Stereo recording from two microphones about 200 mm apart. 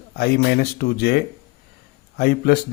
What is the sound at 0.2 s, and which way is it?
Speech, 50° left (ahead or behind).